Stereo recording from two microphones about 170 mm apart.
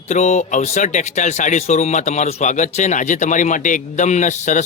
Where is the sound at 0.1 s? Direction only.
45° left (ahead or behind).